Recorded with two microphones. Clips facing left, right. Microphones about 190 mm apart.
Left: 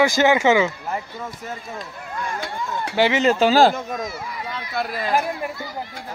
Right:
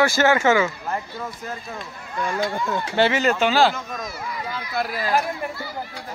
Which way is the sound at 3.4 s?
40° left (ahead or behind).